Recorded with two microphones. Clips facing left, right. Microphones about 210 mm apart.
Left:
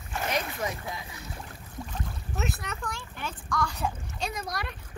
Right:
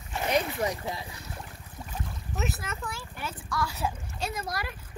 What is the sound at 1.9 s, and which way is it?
Boat, 5° right (ahead or behind).